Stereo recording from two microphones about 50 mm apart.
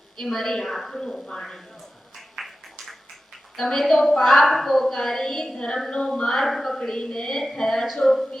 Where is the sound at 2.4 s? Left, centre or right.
Centre.